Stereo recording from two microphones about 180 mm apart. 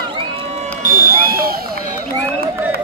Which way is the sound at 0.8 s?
50° right (ahead or behind).